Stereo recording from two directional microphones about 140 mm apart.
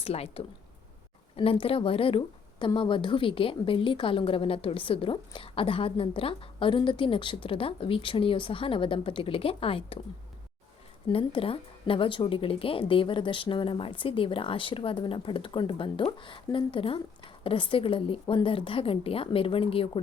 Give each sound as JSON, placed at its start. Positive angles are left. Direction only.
{"t": 0.0, "sound": "speech", "side_deg": 45}
{"t": 11.1, "sound": "speech", "side_deg": 40}